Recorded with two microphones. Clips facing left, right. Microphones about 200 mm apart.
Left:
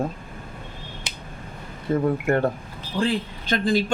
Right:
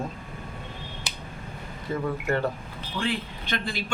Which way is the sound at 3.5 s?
45° left (ahead or behind).